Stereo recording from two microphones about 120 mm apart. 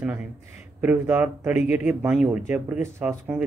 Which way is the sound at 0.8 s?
15° right (ahead or behind).